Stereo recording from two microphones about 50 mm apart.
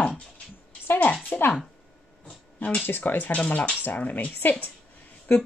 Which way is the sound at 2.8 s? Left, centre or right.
Left.